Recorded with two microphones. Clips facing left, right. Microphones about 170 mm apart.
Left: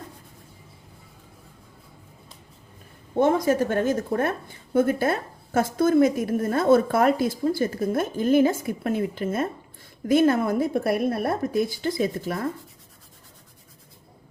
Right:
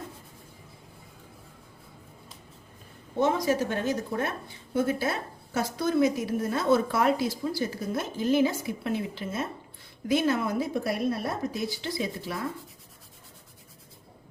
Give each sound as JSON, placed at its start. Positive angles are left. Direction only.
{"t": 3.2, "sound": "a woman's voice", "side_deg": 55}